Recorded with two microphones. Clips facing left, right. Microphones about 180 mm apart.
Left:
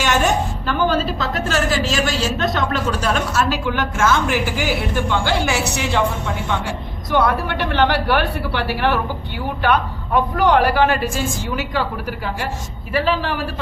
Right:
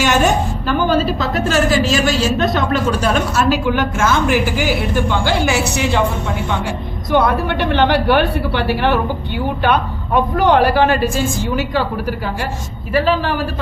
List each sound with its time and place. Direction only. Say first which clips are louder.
0.7 s a woman's voice: right 3 dB; 10° right (ahead or behind)
7.1 s a man's voice: right 3 dB; 20° right (ahead or behind); by 13.5 s 40° right (ahead or behind)